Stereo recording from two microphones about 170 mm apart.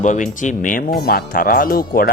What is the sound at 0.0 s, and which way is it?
Speech, 45° left (ahead or behind).